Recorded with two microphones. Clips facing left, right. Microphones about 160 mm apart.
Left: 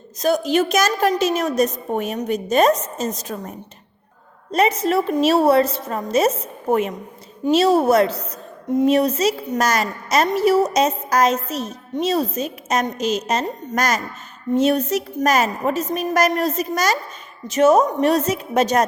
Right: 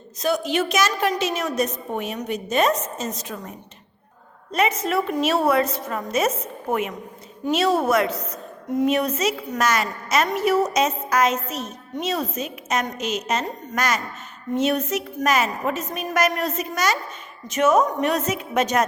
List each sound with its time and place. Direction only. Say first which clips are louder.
0.2 s a woman's voice: left 4 dB; 40° left (ahead or behind)
4.5 s a woman's voice: left 4 dB; 35° left (ahead or behind)